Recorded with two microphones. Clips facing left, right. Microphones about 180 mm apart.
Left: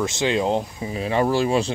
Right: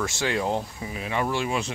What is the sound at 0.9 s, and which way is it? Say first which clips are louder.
Speech: left 7 dB; 30° left (ahead or behind).